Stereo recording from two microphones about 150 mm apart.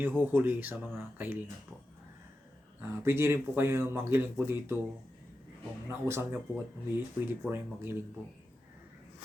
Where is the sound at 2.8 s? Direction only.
15° right (ahead or behind).